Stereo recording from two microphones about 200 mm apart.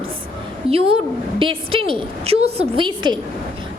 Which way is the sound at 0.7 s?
30° right (ahead or behind).